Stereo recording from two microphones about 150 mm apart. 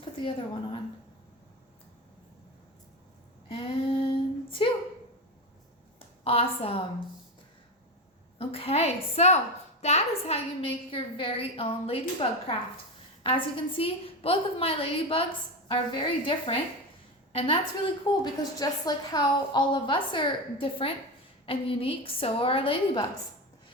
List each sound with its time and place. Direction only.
0.0 s a woman's voice: 35° left (ahead or behind)
3.5 s female singing: 40° left (ahead or behind)
4.6 s a woman's voice: 35° left (ahead or behind)
6.0 s a woman's voice: 40° left (ahead or behind)
8.4 s a woman's voice: 40° left (ahead or behind)